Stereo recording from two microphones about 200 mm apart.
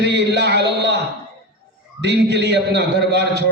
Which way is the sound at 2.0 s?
60° right (ahead or behind).